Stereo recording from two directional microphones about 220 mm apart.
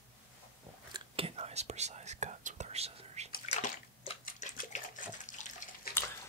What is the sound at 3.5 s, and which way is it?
Bathtub, 30° left (ahead or behind).